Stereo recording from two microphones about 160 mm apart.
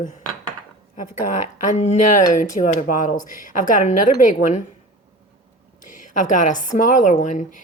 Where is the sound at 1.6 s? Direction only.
45° left (ahead or behind).